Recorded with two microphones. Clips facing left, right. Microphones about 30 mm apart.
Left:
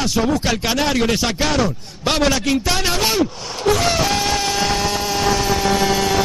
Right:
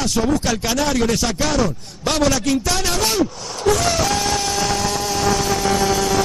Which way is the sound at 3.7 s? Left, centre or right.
Left.